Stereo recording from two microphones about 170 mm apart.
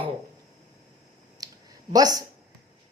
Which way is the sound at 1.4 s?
20° right (ahead or behind).